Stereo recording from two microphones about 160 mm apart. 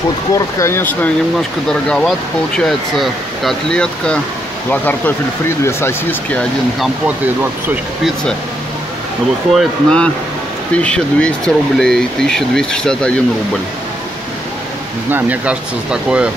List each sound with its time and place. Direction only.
0.3 s speech: 15° left (ahead or behind)
9.5 s speech: centre (ahead or behind)
15.0 s speech: 10° right (ahead or behind)